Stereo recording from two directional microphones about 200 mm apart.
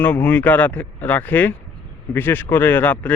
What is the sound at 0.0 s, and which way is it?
Speech, 10° left (ahead or behind).